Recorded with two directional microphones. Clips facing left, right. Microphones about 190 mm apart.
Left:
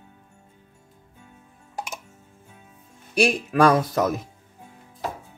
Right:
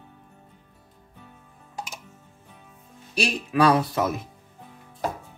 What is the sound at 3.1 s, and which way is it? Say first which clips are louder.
Speech: left 4 dB; 50° left (ahead or behind).